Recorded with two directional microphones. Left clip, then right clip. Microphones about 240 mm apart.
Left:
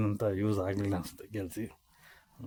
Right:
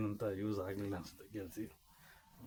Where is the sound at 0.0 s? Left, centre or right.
Left.